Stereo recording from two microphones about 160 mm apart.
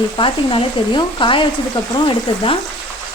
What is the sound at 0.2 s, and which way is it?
Speech, 30° left (ahead or behind).